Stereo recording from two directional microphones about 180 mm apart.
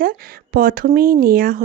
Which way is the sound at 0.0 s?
55° right (ahead or behind).